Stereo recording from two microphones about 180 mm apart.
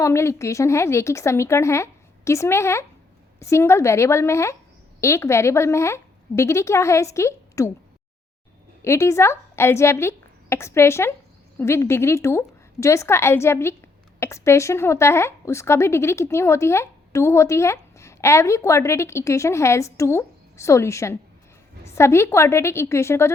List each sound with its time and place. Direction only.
0.0 s a woman's voice: 15° left (ahead or behind)
8.8 s a woman's voice: 15° left (ahead or behind)